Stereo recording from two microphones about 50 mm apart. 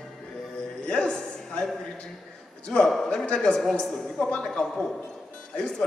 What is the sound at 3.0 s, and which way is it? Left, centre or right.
Speech, centre.